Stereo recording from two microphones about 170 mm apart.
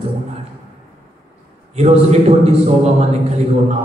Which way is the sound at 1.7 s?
40° right (ahead or behind).